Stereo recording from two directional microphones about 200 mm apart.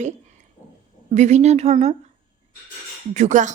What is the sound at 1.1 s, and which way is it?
Speech, 35° right (ahead or behind).